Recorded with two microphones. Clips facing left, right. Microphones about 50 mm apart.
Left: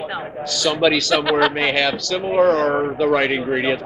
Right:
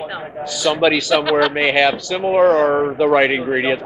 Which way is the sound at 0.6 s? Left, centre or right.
Centre.